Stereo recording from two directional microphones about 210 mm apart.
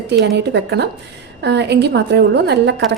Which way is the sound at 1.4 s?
55° right (ahead or behind).